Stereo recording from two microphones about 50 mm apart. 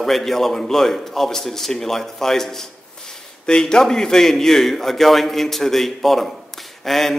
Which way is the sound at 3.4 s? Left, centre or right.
Centre.